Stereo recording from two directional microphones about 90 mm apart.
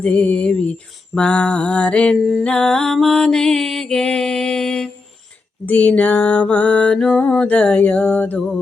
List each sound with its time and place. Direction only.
0.0 s mantra: 15° left (ahead or behind)